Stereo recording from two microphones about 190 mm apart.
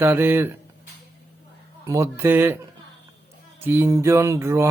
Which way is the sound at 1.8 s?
15° right (ahead or behind).